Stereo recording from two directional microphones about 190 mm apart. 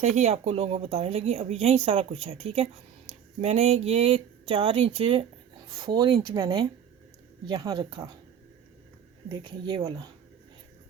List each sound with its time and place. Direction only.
0.2 s speech: 35° right (ahead or behind)
9.3 s speech: 25° right (ahead or behind)